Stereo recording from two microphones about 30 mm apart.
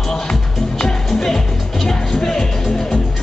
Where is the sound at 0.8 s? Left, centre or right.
Centre.